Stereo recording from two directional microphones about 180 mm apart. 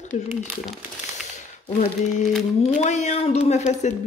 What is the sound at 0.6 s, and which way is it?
Crumpling, centre (ahead or behind).